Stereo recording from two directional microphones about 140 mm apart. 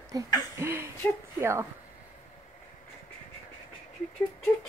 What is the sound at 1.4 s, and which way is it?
Speech, 20° right (ahead or behind).